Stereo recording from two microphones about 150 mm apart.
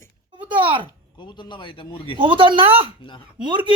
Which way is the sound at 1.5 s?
35° left (ahead or behind).